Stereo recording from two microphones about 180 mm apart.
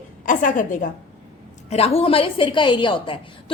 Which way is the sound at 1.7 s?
35° left (ahead or behind).